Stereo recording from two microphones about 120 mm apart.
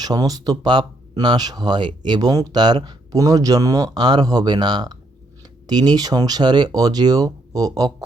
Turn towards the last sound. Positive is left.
turn(degrees=-30)  # may be behind; listen again after turning